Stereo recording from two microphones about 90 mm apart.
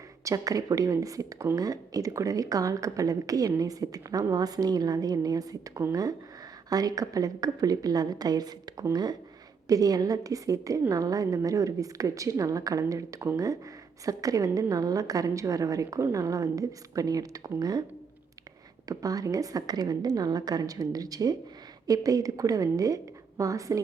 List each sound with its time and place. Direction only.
0.3 s a woman's voice: 40° right (ahead or behind)
18.9 s a woman's voice: 40° right (ahead or behind)